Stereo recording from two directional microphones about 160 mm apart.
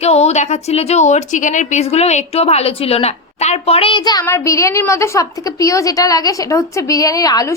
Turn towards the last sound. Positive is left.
turn(degrees=20)  # may be behind; listen again after turning